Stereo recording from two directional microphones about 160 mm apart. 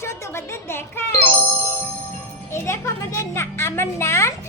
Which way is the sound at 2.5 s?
15° left (ahead or behind).